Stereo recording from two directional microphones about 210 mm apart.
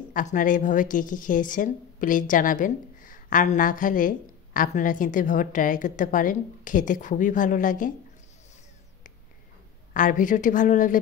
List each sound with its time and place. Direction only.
0.1 s a woman's voice: 40° left (ahead or behind)
9.9 s a woman's voice: 40° left (ahead or behind)